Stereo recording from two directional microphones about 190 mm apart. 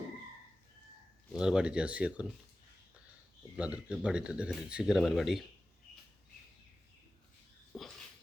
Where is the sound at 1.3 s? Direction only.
5° right (ahead or behind).